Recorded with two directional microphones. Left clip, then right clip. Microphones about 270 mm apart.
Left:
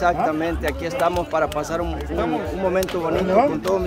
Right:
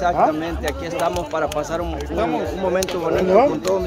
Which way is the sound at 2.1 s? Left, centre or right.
Right.